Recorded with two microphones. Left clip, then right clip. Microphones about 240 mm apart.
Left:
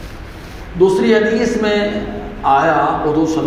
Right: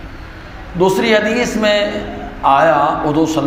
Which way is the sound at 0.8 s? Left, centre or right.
Right.